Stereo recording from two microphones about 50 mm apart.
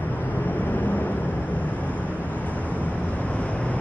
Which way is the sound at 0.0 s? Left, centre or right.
Left.